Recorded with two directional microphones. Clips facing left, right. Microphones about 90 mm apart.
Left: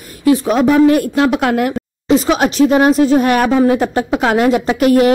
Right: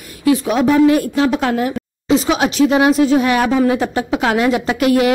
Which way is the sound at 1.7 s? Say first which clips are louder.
Left 2 dB; 45° left (ahead or behind).